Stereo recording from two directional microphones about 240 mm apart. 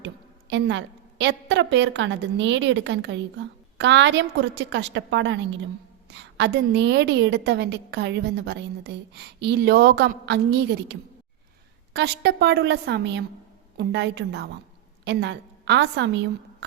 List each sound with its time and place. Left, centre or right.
0.0 s a woman's voice: right
11.9 s a woman's voice: right